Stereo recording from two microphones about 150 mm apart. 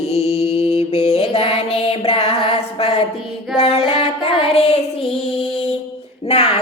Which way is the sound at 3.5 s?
40° left (ahead or behind).